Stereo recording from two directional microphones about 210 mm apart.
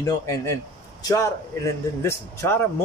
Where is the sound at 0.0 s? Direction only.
15° left (ahead or behind).